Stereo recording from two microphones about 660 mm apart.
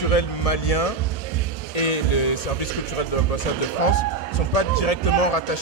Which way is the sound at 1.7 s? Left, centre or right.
Left.